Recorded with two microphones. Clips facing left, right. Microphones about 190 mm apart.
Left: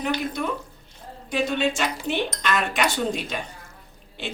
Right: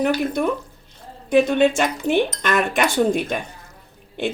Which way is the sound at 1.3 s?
55° right (ahead or behind).